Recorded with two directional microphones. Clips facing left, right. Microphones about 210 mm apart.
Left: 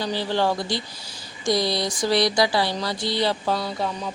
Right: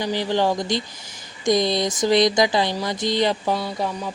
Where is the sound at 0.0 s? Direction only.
15° right (ahead or behind).